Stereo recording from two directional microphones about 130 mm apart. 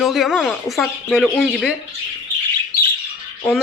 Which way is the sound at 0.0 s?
Centre (ahead or behind).